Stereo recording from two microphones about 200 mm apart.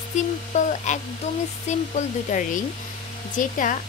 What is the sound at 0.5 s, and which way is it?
Speech, 35° left (ahead or behind).